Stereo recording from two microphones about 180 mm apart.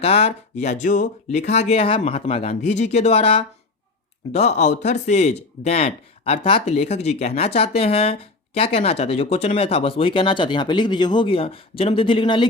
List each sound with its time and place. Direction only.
0.0 s speech: 35° left (ahead or behind)